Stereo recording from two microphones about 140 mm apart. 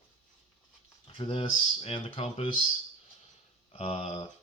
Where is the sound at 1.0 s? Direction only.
40° left (ahead or behind).